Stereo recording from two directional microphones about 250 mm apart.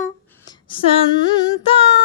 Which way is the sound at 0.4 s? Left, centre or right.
Left.